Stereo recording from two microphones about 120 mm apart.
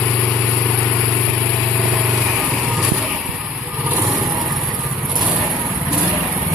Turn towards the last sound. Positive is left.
turn(degrees=-10)  # may be behind; listen again after turning